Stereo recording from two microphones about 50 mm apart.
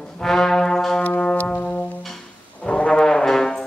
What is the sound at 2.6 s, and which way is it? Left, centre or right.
Brass instrument, left.